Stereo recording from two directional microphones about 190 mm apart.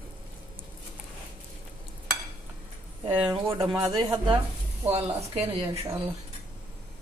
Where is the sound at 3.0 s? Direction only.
25° right (ahead or behind).